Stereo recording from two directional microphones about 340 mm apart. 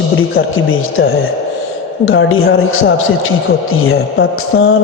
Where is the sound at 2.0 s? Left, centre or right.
Left.